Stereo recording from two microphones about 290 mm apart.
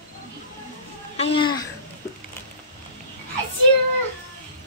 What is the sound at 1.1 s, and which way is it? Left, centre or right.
Speech, centre.